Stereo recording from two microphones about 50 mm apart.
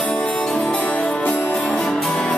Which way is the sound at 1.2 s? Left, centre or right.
Left.